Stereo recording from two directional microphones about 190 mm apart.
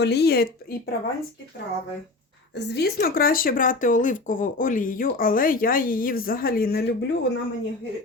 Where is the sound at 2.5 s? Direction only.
60° left (ahead or behind).